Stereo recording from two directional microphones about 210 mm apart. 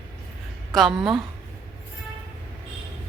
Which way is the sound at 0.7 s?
Centre (ahead or behind).